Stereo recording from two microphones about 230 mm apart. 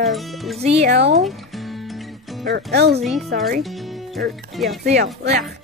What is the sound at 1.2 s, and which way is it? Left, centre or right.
Music, centre.